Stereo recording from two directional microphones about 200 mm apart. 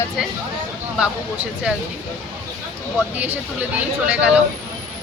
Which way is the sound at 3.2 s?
10° right (ahead or behind).